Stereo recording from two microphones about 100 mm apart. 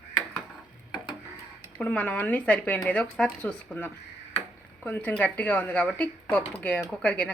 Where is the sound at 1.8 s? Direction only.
10° left (ahead or behind).